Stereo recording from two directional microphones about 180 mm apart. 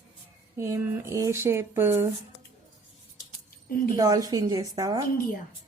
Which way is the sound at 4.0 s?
20° right (ahead or behind).